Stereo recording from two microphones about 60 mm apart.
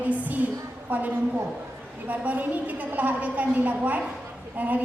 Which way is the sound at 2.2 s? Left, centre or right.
Right.